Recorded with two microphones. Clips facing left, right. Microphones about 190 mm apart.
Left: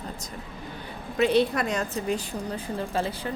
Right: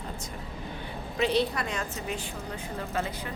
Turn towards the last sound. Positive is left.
turn(degrees=30)  # may be behind; listen again after turning